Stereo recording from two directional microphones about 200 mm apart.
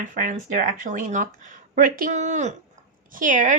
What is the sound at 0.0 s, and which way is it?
A woman's voice, 40° right (ahead or behind).